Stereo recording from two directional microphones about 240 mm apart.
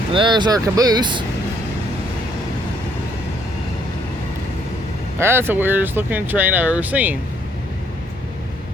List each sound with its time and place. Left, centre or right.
0.1 s speech: centre
5.2 s speech: centre